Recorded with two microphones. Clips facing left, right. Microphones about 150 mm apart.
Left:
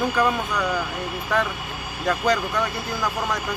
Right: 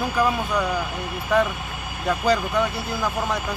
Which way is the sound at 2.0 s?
5° right (ahead or behind).